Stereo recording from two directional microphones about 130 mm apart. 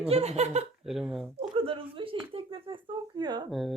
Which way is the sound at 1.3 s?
45° right (ahead or behind).